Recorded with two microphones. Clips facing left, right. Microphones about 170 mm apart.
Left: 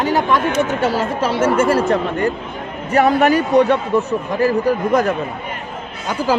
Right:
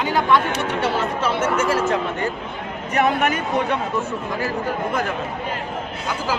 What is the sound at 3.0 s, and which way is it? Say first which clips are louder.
Speech: left 6 dB; 35° left (ahead or behind).